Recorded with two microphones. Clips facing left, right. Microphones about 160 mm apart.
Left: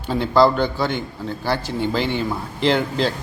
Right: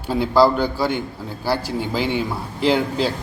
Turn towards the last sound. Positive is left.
turn(degrees=-5)  # may be behind; listen again after turning